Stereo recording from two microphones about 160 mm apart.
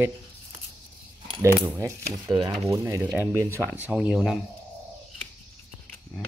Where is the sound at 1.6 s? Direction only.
15° right (ahead or behind).